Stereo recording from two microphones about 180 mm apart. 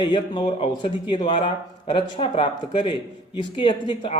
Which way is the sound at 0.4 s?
30° left (ahead or behind).